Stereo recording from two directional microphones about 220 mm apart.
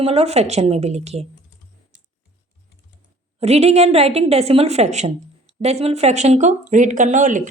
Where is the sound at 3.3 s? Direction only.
30° right (ahead or behind).